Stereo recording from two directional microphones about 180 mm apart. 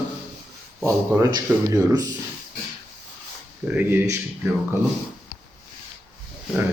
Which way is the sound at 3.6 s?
10° right (ahead or behind).